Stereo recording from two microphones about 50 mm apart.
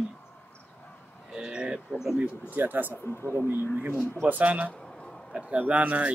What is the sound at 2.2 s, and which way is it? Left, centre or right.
Speech, right.